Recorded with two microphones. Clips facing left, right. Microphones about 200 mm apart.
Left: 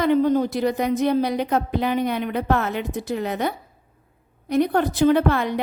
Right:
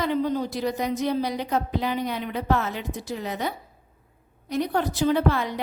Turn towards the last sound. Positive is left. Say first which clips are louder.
# left 4 dB
turn(degrees=60)  # may be behind; listen again after turning